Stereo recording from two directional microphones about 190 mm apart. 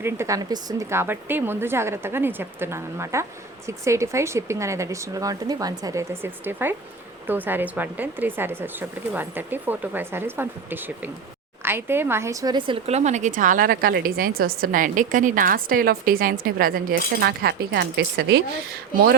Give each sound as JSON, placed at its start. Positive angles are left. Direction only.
{"t": 0.0, "sound": "speech", "side_deg": -15}